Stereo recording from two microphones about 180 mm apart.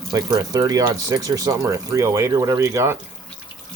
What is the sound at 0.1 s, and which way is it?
Speech, 20° right (ahead or behind).